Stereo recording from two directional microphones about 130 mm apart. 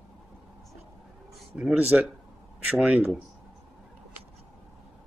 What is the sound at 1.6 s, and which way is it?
Speech, 5° right (ahead or behind).